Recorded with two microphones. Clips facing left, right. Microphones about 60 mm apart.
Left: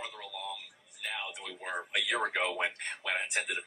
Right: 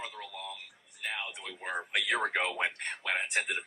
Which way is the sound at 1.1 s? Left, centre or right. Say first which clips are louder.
Left 2 dB; right.